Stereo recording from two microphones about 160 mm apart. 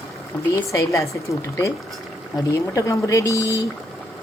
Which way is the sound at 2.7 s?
20° left (ahead or behind).